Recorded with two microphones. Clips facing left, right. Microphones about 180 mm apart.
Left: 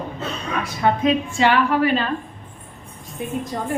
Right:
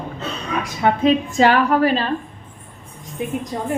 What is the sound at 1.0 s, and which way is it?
A woman's voice, 40° right (ahead or behind).